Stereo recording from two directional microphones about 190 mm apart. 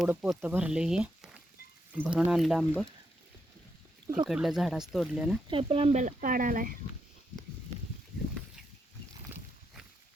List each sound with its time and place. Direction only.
0.0 s speech: 5° right (ahead or behind)
4.3 s speech: centre (ahead or behind)
5.5 s speech: 30° right (ahead or behind); by 6.7 s 45° right (ahead or behind)